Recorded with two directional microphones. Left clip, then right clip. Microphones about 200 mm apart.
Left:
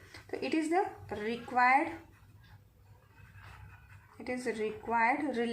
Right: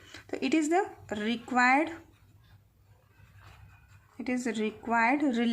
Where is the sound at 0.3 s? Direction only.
50° right (ahead or behind).